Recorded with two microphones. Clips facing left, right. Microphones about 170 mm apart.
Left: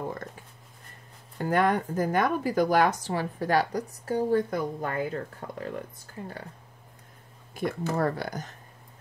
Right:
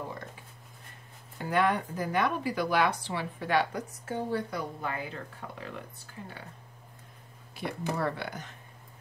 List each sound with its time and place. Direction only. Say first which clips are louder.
1.4 s speech: left 3 dB; 45° left (ahead or behind)
7.6 s speech: left 5 dB; 45° left (ahead or behind)